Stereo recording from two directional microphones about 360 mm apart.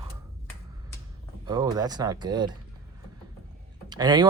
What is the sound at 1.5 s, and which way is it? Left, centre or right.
Speech, centre.